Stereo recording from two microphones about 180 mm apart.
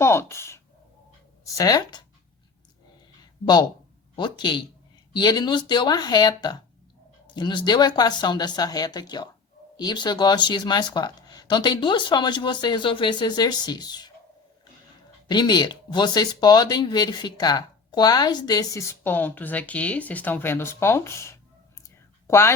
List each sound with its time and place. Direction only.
0.0 s speech: 15° left (ahead or behind)
3.4 s speech: 25° left (ahead or behind)
15.3 s speech: 25° left (ahead or behind)
21.8 s a sound: 15° left (ahead or behind)